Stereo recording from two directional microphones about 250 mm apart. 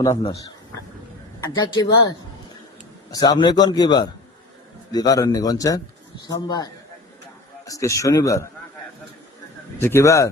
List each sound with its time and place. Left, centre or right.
0.0 s a man's voice: centre
1.5 s a man's voice: centre
9.7 s a man's voice: centre